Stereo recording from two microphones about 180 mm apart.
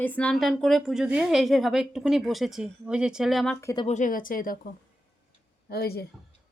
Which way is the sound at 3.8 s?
45° left (ahead or behind).